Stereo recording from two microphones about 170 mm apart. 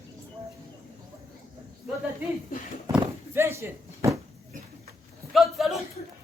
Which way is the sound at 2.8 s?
15° right (ahead or behind).